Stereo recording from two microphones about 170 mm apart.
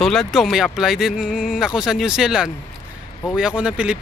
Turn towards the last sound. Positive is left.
turn(degrees=-5)  # may be behind; listen again after turning